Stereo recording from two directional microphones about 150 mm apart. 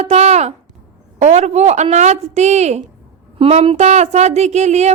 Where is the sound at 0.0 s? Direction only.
45° right (ahead or behind).